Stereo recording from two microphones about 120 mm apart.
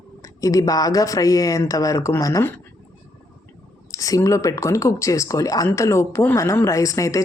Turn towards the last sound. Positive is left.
turn(degrees=25)  # may be behind; listen again after turning